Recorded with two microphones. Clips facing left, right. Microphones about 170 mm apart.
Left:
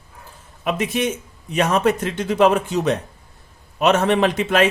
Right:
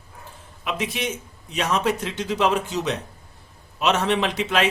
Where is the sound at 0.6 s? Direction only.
45° left (ahead or behind).